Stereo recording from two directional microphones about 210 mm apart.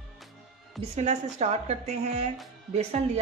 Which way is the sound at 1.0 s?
35° right (ahead or behind).